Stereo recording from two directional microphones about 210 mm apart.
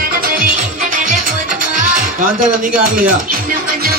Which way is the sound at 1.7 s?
40° right (ahead or behind).